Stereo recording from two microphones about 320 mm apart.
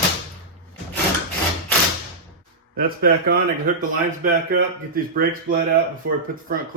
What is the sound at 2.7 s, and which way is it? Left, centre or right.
Speech, right.